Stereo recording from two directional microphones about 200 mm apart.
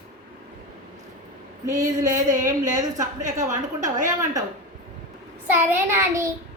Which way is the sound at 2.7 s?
20° right (ahead or behind).